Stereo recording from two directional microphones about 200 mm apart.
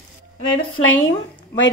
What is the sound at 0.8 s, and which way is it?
Speech, 30° left (ahead or behind).